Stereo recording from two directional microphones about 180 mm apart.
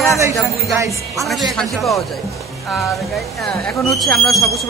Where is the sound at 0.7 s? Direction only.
15° right (ahead or behind).